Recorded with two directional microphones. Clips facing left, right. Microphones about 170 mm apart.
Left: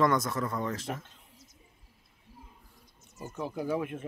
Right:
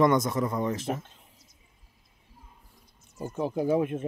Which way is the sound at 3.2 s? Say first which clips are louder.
Right 6 dB; 20° right (ahead or behind).